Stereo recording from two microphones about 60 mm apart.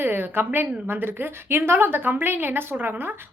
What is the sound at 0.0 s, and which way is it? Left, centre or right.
A woman's voice, right.